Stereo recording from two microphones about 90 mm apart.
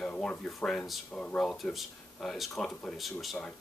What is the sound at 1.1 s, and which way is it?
Speech, 15° left (ahead or behind).